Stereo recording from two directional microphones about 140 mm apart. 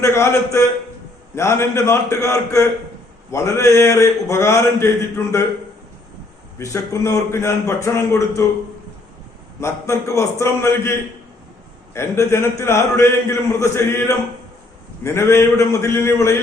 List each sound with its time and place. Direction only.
0.0 s a man's voice: 20° left (ahead or behind)
6.6 s a man's voice: 20° left (ahead or behind)
9.6 s a man's voice: 20° left (ahead or behind)
11.9 s a man's voice: 20° left (ahead or behind)